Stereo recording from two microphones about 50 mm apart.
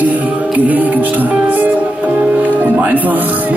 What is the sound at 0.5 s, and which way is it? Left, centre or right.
Music, right.